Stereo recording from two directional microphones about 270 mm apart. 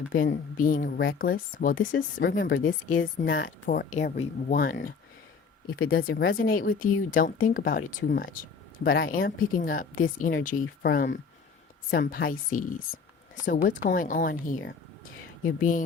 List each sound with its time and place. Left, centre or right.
0.1 s speech: left
6.1 s speech: left
15.0 s a sound: left